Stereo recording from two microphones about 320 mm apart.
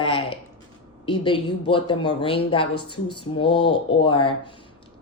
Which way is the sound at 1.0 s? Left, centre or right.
Centre.